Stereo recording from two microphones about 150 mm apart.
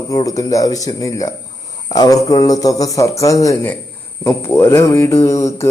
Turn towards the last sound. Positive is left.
turn(degrees=20)  # may be behind; listen again after turning